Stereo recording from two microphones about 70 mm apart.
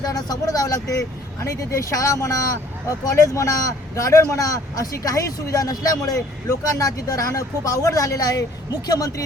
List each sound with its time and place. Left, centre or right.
0.0 s a man's voice: left